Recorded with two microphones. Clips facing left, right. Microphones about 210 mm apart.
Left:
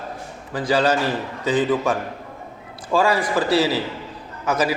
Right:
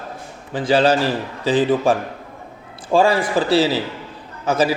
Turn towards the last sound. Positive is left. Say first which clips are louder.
# right 3 dB
turn(degrees=-30)  # may be behind; listen again after turning